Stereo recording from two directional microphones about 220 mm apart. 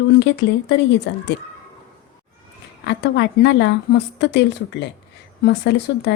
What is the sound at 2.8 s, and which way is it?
A woman's voice, 50° left (ahead or behind).